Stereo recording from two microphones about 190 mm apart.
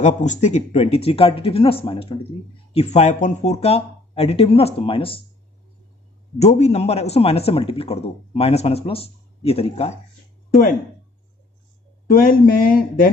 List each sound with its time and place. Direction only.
0.0 s speech: 40° left (ahead or behind)
6.3 s speech: 35° left (ahead or behind)
12.1 s speech: 45° left (ahead or behind)